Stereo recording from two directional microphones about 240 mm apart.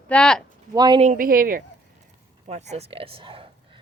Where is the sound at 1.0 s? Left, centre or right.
Right.